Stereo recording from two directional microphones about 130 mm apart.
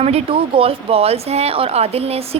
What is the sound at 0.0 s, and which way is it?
Speech, 50° right (ahead or behind).